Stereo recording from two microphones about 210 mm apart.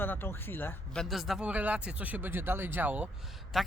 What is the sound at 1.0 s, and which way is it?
Speech, centre (ahead or behind).